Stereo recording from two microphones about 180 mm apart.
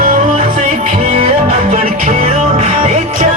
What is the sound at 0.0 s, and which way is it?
Music, 50° right (ahead or behind).